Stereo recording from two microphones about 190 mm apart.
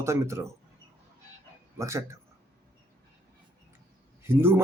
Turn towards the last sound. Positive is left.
turn(degrees=-10)  # may be behind; listen again after turning